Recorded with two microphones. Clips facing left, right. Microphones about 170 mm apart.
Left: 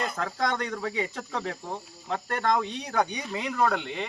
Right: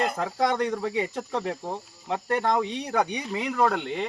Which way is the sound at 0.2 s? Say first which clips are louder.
Right 4 dB; 10° right (ahead or behind).